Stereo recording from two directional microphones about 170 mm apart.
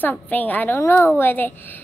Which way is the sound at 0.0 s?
10° left (ahead or behind).